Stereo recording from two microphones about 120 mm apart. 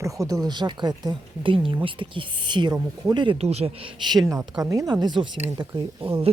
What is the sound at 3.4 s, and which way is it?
Speech, 60° right (ahead or behind).